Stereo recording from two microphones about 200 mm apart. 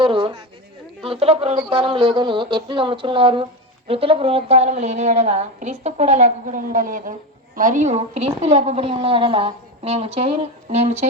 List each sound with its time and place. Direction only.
0.0 s a woman's voice: 25° right (ahead or behind)